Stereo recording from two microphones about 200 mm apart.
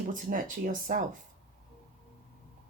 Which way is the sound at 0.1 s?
40° right (ahead or behind).